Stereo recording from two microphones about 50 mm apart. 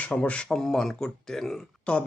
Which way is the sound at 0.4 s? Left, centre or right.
Centre.